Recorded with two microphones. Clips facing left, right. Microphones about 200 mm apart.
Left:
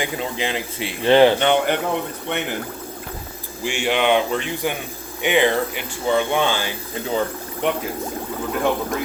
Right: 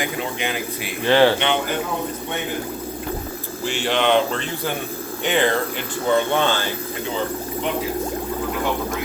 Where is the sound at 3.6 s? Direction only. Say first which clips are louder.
Left 1 dB; 10° left (ahead or behind).